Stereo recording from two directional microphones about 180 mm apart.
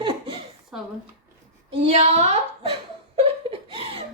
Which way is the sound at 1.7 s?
30° right (ahead or behind).